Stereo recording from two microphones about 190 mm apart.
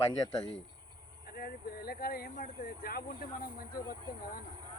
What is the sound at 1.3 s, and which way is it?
Speech, 55° left (ahead or behind).